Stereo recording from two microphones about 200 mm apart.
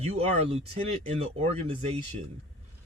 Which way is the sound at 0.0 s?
30° right (ahead or behind).